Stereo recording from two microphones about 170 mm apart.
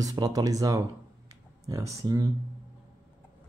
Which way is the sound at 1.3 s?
20° right (ahead or behind).